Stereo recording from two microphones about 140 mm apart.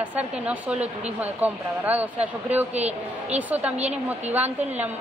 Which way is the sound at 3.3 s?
10° right (ahead or behind).